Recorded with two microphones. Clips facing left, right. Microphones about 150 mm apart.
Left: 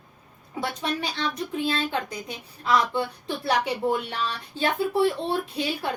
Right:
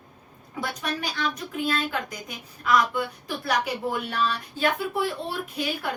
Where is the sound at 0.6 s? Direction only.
25° left (ahead or behind).